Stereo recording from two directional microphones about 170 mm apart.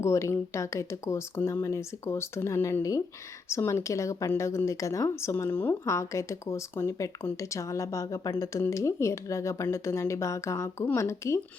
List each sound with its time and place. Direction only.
0.0 s speech: 15° left (ahead or behind)